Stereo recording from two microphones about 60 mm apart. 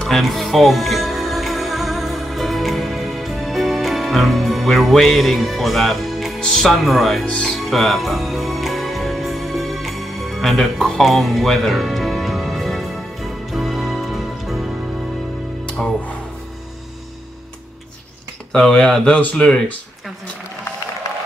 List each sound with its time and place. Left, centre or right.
0.1 s music: centre
6.4 s speech: centre
7.2 s speech: centre
7.5 s music: centre
18.5 s speech: centre